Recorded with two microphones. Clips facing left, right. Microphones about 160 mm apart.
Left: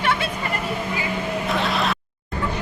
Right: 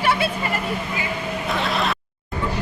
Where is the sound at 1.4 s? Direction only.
Centre (ahead or behind).